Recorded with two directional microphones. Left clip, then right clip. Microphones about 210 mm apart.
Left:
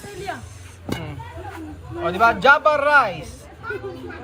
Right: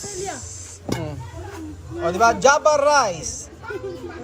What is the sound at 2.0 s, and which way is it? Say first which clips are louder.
Speech: even; 20° right (ahead or behind).